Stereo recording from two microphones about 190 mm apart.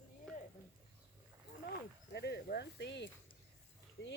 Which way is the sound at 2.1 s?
60° left (ahead or behind).